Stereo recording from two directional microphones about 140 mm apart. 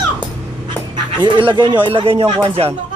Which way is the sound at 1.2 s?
35° right (ahead or behind).